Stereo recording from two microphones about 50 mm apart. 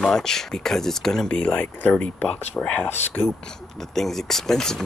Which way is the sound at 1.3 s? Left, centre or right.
Left.